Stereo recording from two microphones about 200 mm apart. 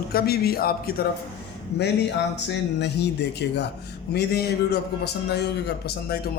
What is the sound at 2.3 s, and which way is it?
Speech, 60° left (ahead or behind).